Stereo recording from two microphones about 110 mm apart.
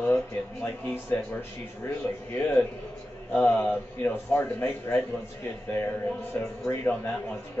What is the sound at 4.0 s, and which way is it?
Speech, 20° left (ahead or behind).